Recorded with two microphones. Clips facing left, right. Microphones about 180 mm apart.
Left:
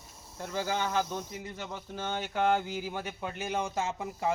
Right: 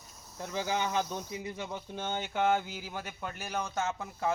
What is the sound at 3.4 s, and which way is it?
Speech, 25° left (ahead or behind).